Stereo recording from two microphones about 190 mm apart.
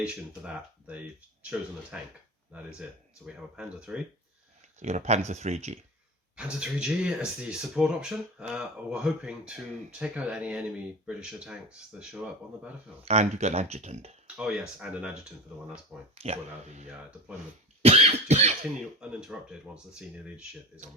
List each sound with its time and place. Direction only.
0.0 s speech: 5° right (ahead or behind)
3.2 s speech: 5° right (ahead or behind)
4.8 s speech: 35° right (ahead or behind)
6.3 s speech: 5° right (ahead or behind)
13.1 s speech: 35° right (ahead or behind)
14.3 s speech: 5° right (ahead or behind)
16.1 s speech: 35° right (ahead or behind)
17.8 s cough: 35° right (ahead or behind)
18.9 s speech: 5° right (ahead or behind)